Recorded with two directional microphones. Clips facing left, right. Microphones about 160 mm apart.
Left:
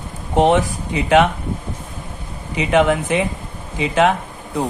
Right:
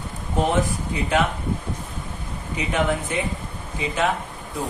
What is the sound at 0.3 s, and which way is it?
Speech, 85° left.